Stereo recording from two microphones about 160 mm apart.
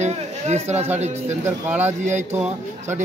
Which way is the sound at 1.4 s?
15° right (ahead or behind).